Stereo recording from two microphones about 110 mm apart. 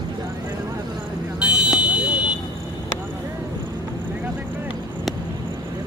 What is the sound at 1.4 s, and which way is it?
Fire alarm, 10° right (ahead or behind).